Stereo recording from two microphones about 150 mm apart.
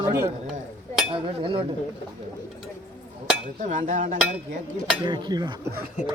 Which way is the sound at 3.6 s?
55° right (ahead or behind).